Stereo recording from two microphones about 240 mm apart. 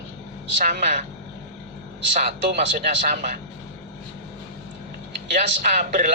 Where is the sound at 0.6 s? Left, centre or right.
Right.